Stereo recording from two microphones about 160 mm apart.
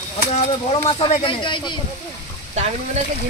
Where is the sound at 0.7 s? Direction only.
35° left (ahead or behind).